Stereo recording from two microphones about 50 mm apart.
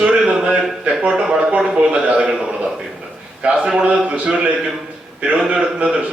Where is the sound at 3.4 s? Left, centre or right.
Right.